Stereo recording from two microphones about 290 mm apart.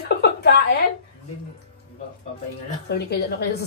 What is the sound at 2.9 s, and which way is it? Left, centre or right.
Speech, left.